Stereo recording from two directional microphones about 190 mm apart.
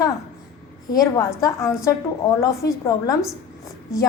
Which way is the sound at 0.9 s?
20° left (ahead or behind).